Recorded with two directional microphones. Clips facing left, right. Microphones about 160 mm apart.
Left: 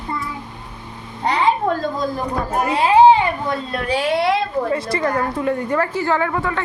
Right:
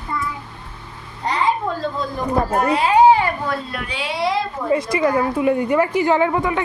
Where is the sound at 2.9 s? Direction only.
25° left (ahead or behind).